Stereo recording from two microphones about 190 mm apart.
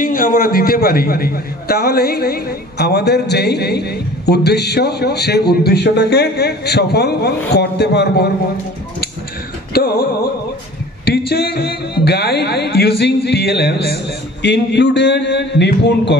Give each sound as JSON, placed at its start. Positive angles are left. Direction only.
{"t": 0.0, "sound": "a man's voice", "side_deg": 50}
{"t": 11.1, "sound": "a man's voice", "side_deg": 55}